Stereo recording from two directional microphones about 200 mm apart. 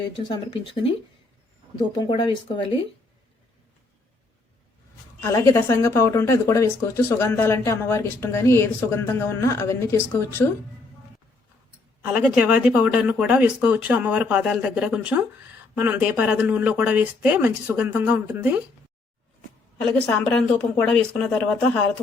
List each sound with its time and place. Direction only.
0.3 s speech: 25° left (ahead or behind)
2.0 s speech: 25° left (ahead or behind)
5.2 s a woman's voice: 15° left (ahead or behind)
12.1 s speech: 5° right (ahead or behind)
19.8 s speech: 5° left (ahead or behind)